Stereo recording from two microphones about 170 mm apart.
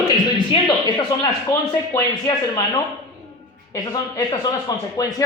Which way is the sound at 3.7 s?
20° left (ahead or behind).